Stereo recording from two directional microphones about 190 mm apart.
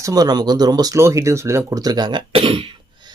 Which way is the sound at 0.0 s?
20° right (ahead or behind).